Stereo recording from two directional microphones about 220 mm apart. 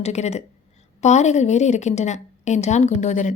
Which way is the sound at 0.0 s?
30° left (ahead or behind).